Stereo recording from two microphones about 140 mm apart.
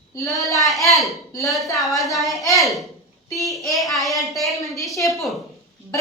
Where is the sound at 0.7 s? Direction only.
Centre (ahead or behind).